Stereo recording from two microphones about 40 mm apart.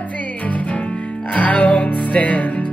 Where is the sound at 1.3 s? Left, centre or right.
Left.